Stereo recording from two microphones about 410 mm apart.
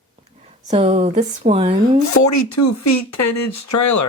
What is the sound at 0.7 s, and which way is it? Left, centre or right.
Speech, centre.